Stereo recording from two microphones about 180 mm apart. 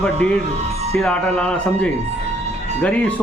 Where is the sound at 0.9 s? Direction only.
5° left (ahead or behind).